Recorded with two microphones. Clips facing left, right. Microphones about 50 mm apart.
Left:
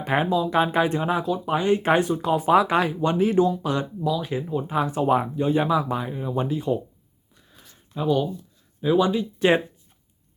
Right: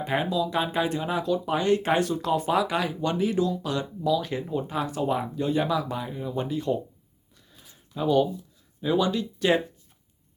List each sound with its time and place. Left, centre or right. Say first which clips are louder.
0.0 s speech: left 4 dB; left
1.2 s speech: left 1 dB; centre
1.5 s speech: left 4 dB; left
2.5 s speech: left 10 dB; left
4.0 s speech: even; centre
4.7 s speech: left 7 dB; left
7.9 s speech: even; centre
9.0 s speech: left 4 dB; left